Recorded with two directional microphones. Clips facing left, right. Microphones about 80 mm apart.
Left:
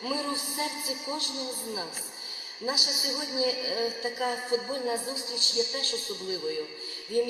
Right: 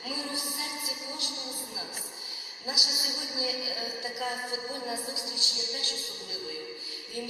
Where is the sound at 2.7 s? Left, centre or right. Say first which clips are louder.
Left 3 dB; left.